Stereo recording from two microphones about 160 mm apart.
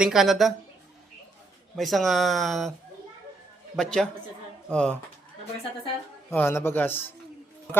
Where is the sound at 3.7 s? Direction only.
5° left (ahead or behind).